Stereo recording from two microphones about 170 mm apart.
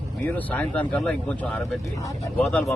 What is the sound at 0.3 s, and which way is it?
A man's voice, 10° left (ahead or behind).